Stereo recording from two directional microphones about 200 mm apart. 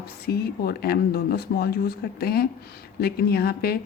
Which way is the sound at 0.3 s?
50° left (ahead or behind).